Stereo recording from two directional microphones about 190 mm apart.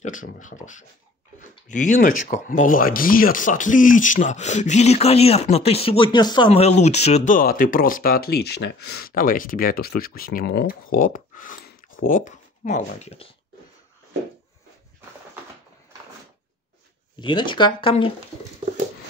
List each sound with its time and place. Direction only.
0.0 s speech: 40° left (ahead or behind)
17.2 s speech: 25° left (ahead or behind)